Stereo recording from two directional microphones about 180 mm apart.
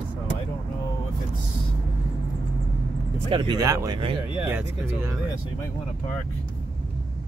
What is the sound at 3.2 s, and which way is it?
Speech, 25° right (ahead or behind).